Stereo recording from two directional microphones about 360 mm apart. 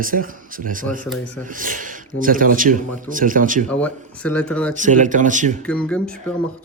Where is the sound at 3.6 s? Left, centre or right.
Centre.